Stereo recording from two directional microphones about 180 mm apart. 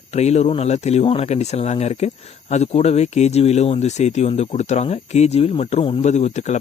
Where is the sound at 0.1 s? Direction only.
35° left (ahead or behind).